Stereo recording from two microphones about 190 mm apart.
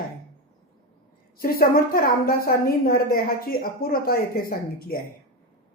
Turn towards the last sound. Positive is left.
turn(degrees=50)  # may be behind; listen again after turning